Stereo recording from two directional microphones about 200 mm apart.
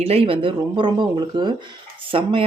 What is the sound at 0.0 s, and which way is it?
Speech, 30° right (ahead or behind).